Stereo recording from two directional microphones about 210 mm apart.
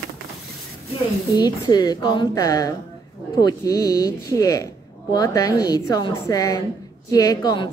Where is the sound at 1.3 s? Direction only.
20° left (ahead or behind).